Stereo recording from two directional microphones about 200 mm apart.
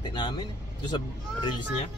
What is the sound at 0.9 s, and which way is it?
Vehicle, 20° left (ahead or behind).